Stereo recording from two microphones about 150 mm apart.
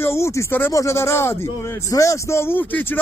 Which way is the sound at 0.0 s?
20° left (ahead or behind).